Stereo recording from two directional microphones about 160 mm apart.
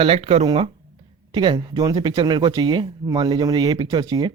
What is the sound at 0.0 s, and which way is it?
Speech, 40° right (ahead or behind).